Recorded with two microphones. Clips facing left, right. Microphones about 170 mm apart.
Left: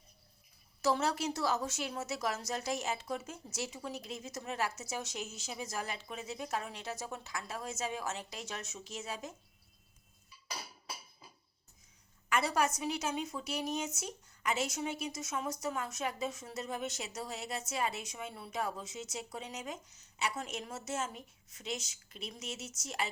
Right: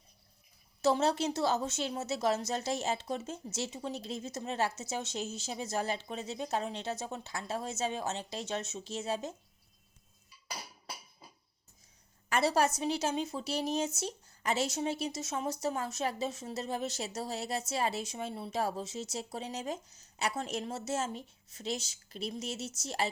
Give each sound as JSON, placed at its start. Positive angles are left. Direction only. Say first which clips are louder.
{"t": 0.8, "sound": "a woman's voice", "louder": "right 4 dB", "side_deg": -25}
{"t": 12.3, "sound": "a woman's voice", "louder": "right 3 dB", "side_deg": -30}